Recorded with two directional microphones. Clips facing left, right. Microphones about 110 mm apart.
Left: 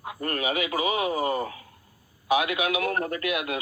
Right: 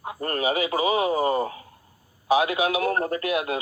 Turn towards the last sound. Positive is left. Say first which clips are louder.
# right 3 dB
turn(degrees=-30)  # may be behind; listen again after turning